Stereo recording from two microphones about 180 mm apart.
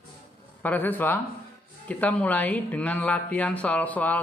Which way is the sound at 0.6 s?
10° left (ahead or behind).